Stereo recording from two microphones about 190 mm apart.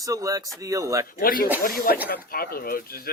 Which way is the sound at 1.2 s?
50° left (ahead or behind).